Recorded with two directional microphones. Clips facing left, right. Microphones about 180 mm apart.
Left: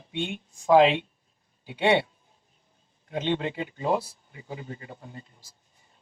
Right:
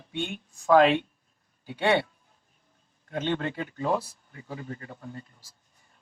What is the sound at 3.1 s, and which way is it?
Speech, 15° left (ahead or behind).